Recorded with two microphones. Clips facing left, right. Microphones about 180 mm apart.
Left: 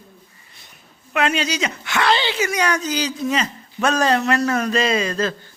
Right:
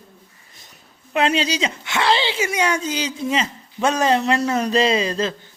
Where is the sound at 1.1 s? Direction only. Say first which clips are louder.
Right 1 dB; 30° right (ahead or behind).